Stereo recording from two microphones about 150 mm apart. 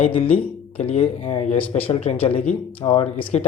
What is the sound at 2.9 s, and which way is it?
Speech, 35° left (ahead or behind).